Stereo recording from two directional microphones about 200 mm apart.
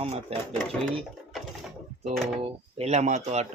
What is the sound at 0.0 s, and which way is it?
Speech, 30° right (ahead or behind).